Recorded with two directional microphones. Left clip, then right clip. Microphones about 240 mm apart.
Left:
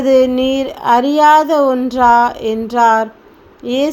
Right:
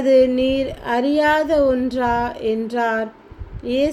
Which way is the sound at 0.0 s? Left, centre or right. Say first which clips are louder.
Left 3 dB; centre.